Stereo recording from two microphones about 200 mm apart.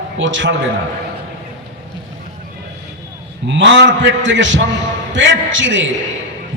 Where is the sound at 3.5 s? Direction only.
65° right (ahead or behind).